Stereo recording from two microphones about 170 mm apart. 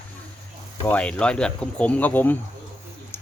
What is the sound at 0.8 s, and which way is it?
Speech, 5° left (ahead or behind).